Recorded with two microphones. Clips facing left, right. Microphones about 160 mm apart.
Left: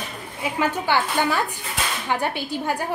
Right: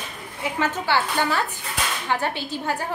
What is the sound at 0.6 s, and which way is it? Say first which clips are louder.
A woman's voice: left 1 dB; 15° left (ahead or behind).